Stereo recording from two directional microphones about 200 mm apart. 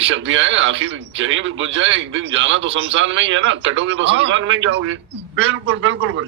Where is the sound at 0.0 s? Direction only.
70° right (ahead or behind).